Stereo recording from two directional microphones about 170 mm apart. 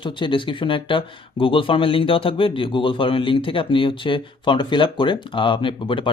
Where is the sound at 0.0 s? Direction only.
30° left (ahead or behind).